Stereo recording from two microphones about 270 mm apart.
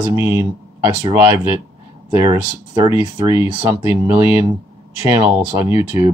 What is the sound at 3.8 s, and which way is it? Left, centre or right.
Speech, centre.